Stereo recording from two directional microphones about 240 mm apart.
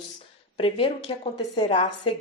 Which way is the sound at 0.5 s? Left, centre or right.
Left.